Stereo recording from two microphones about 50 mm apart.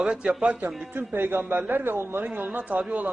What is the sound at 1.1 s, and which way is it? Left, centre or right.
Speech, right.